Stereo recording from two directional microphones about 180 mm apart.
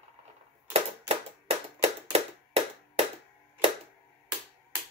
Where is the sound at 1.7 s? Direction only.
35° right (ahead or behind).